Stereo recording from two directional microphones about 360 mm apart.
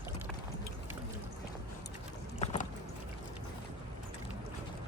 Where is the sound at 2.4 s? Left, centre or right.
Centre.